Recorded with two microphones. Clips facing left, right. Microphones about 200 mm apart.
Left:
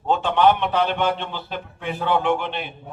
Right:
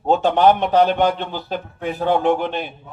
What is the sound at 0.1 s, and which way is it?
A man's voice, 40° right (ahead or behind).